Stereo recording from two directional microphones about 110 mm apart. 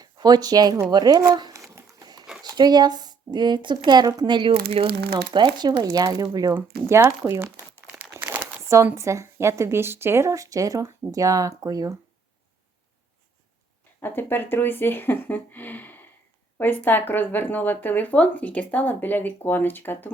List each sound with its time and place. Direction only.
0.0 s speech: 40° right (ahead or behind)
2.0 s dog: 35° right (ahead or behind)
2.4 s speech: 40° right (ahead or behind); by 4.9 s 55° right (ahead or behind)
5.3 s speech: 40° right (ahead or behind)
6.5 s speech: 20° right (ahead or behind)
7.3 s crumpling: 25° right (ahead or behind)
7.9 s crumpling: 15° right (ahead or behind)
8.6 s speech: 25° right (ahead or behind)
14.0 s speech: 20° left (ahead or behind)